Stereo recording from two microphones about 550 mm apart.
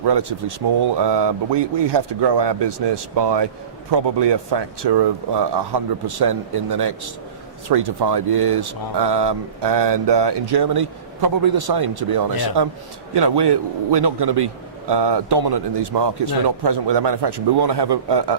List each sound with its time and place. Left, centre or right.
0.0 s a man's voice: right